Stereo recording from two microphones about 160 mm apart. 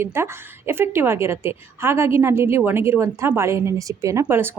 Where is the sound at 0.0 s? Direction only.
15° right (ahead or behind).